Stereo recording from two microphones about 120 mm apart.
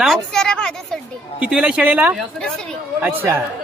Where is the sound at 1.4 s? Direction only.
5° right (ahead or behind).